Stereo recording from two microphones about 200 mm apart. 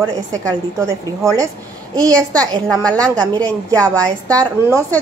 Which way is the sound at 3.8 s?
5° left (ahead or behind).